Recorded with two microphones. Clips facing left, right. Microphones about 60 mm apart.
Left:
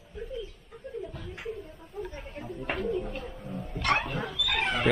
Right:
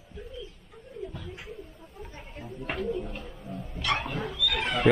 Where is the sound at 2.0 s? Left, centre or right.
Centre.